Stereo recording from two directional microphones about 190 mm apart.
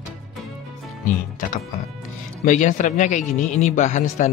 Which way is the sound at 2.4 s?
40° left (ahead or behind).